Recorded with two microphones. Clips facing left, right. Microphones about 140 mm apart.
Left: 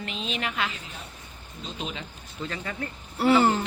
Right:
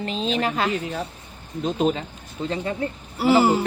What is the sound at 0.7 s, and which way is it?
Speech, 70° right (ahead or behind).